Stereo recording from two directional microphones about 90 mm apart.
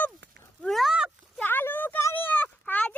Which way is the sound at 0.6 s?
Centre (ahead or behind).